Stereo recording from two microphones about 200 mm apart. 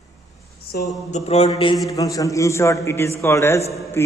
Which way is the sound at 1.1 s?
35° left (ahead or behind).